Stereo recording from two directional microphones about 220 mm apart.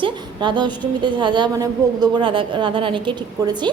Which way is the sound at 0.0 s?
20° right (ahead or behind).